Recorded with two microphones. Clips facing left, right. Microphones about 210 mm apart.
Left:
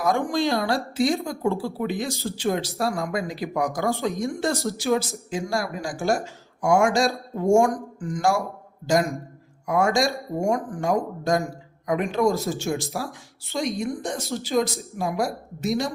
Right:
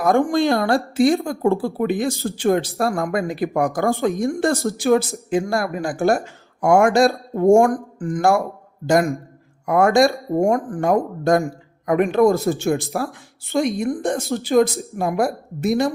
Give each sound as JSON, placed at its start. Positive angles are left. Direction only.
{"t": 0.0, "sound": "a woman's voice", "side_deg": -55}